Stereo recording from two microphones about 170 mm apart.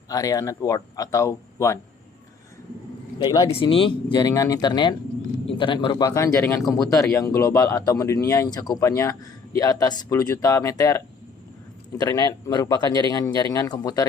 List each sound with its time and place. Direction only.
0.1 s a man's voice: 20° left (ahead or behind)
3.2 s a man's voice: 20° left (ahead or behind)
3.5 s a man's voice: 30° left (ahead or behind)